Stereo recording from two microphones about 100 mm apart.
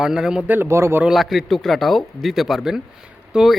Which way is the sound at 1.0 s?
Centre (ahead or behind).